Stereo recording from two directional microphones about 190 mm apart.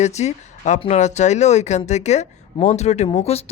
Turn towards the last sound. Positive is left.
turn(degrees=30)  # may be behind; listen again after turning